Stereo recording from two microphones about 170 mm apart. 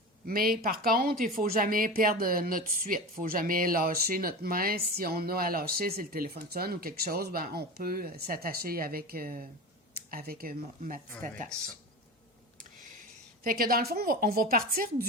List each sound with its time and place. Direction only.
0.3 s speech: 60° right (ahead or behind)
13.4 s speech: 60° right (ahead or behind)